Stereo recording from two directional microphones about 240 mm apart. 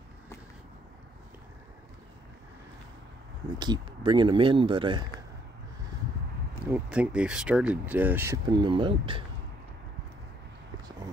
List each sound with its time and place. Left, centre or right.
3.5 s speech: centre
6.7 s speech: centre; by 9.2 s right